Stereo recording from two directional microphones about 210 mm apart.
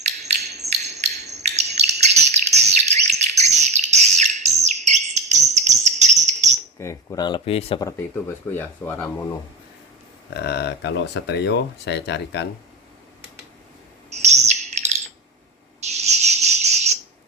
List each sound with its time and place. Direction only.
0.0 s hammer: 30° right (ahead or behind)
0.6 s bird: 30° right (ahead or behind)
5.1 s cricket: 30° right (ahead or behind)
6.7 s speech: 15° left (ahead or behind)
7.8 s speech: 15° left (ahead or behind)
10.3 s speech: 50° left (ahead or behind)
14.1 s bird: 30° right (ahead or behind)
15.9 s cricket: 30° right (ahead or behind)